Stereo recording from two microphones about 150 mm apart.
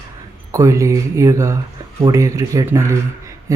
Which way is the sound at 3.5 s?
20° right (ahead or behind).